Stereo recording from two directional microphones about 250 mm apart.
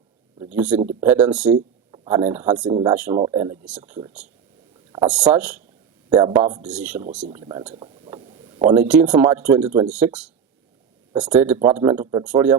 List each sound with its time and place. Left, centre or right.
0.3 s a sound: centre
1.0 s speech: centre
1.9 s a sound: centre
2.6 s speech: centre
2.9 s speech: centre
6.6 s speech: centre
7.3 s speech: centre
7.7 s a sound: right
8.6 s speech: centre